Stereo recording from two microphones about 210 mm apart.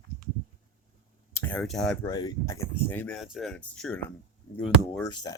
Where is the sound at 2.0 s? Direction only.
20° left (ahead or behind).